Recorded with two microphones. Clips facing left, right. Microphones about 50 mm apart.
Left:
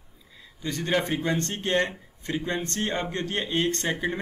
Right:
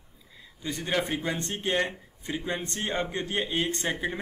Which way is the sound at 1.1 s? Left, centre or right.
Centre.